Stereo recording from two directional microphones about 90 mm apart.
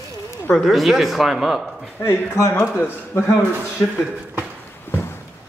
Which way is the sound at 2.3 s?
35° left (ahead or behind).